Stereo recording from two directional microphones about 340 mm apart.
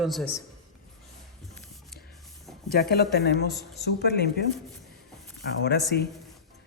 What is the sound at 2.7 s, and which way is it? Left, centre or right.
Speech, left.